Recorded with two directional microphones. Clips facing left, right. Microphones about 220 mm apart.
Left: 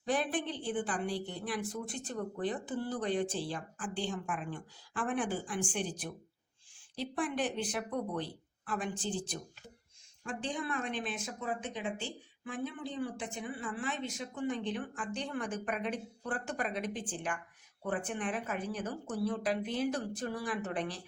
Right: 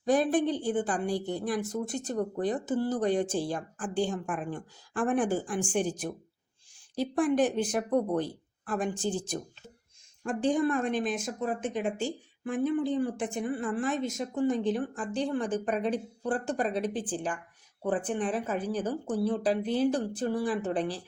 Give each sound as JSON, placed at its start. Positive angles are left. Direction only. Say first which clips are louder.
{"t": 0.0, "sound": "speech", "louder": "right 8 dB", "side_deg": -40}